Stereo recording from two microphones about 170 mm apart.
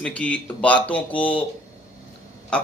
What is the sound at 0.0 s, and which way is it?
Speech, 5° left (ahead or behind).